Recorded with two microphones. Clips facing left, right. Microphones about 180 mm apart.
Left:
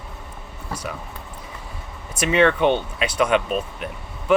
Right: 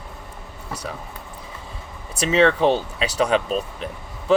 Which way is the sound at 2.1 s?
30° right (ahead or behind).